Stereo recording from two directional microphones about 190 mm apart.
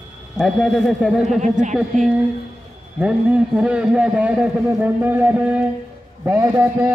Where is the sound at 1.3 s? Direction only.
40° right (ahead or behind).